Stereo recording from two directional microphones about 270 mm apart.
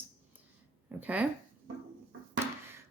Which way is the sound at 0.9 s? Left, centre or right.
Centre.